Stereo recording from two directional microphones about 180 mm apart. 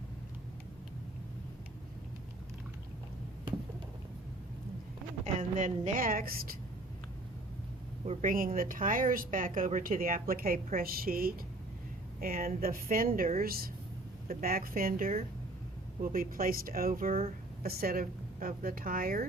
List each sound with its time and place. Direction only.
5.2 s a woman's voice: 40° right (ahead or behind)
8.0 s a woman's voice: 40° right (ahead or behind)